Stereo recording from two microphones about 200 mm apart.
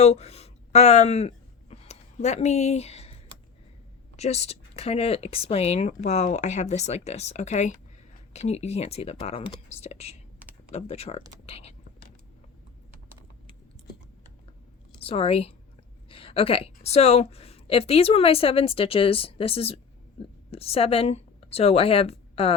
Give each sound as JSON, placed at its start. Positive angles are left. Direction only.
{"t": 0.0, "sound": "speech", "side_deg": 30}
{"t": 1.7, "sound": "a sound", "side_deg": 35}
{"t": 4.2, "sound": "speech", "side_deg": 30}
{"t": 14.9, "sound": "a woman's voice", "side_deg": 30}
{"t": 16.0, "sound": "a sound", "side_deg": 25}
{"t": 16.7, "sound": "a woman's voice", "side_deg": 30}